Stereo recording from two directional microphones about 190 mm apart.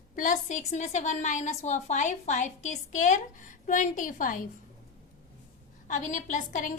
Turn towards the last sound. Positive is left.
turn(degrees=40)  # may be behind; listen again after turning